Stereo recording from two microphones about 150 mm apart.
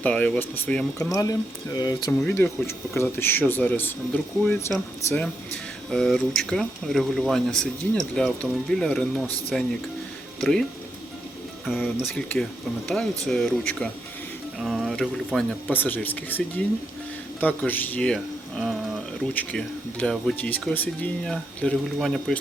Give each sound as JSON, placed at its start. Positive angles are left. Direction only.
{"t": 0.0, "sound": "speech", "side_deg": 10}
{"t": 0.9, "sound": "speech", "side_deg": 25}
{"t": 2.2, "sound": "speech", "side_deg": 15}